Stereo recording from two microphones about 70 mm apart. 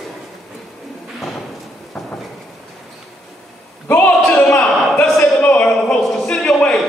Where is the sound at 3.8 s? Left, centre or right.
Left.